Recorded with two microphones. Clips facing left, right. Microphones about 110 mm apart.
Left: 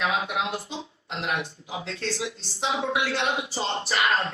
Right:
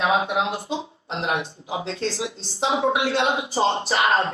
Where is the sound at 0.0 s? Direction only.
30° right (ahead or behind).